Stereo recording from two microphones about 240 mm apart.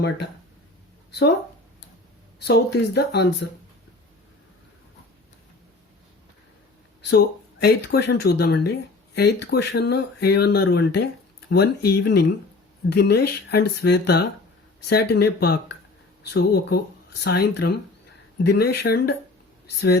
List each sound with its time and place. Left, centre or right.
2.4 s speech: left
7.6 s speech: left